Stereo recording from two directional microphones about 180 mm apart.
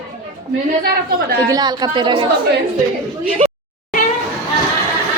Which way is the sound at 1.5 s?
20° right (ahead or behind).